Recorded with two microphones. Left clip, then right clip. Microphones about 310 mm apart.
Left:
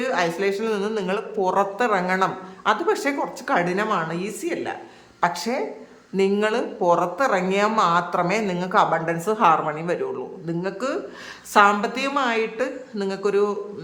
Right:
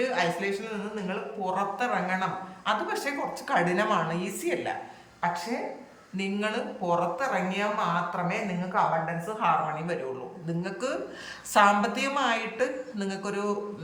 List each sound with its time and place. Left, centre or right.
0.0 s music: centre
1.4 s speech: centre